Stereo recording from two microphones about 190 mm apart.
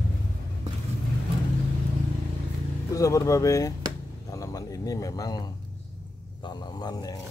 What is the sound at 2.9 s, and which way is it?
Speech, 15° left (ahead or behind).